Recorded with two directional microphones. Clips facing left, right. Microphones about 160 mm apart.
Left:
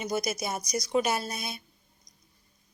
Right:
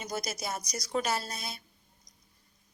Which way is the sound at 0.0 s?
15° left (ahead or behind).